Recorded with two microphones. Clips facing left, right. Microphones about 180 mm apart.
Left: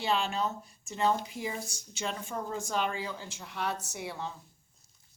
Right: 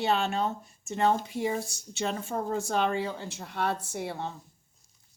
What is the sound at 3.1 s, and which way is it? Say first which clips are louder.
Speech: right 4 dB; 60° right (ahead or behind).